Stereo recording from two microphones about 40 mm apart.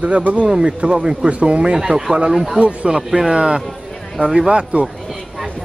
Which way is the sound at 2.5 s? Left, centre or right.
Right.